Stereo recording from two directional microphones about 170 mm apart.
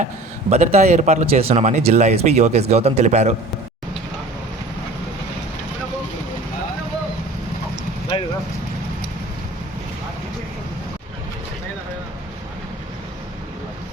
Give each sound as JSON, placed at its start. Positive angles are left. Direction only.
{"t": 0.5, "sound": "speech", "side_deg": -40}
{"t": 8.1, "sound": "vehicle", "side_deg": 30}